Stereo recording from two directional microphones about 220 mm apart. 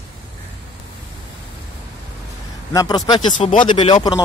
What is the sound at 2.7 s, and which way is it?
A man's voice, 20° left (ahead or behind).